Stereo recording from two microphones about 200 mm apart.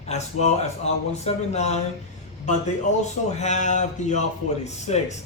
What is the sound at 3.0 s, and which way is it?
A man's voice, 35° left (ahead or behind).